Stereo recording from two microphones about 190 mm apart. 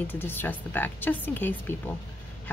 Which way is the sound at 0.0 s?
10° left (ahead or behind).